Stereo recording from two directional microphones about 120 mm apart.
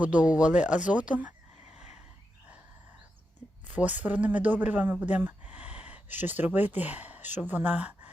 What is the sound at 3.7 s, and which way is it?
Speech, 10° right (ahead or behind).